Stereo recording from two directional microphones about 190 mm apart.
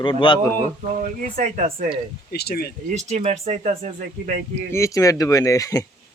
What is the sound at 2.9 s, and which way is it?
Speech, 35° right (ahead or behind).